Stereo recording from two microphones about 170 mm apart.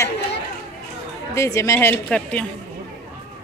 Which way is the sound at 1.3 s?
15° left (ahead or behind).